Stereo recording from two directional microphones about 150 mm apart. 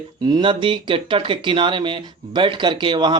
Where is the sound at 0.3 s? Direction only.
30° right (ahead or behind).